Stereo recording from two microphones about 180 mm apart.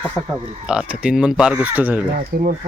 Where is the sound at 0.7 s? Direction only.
5° right (ahead or behind).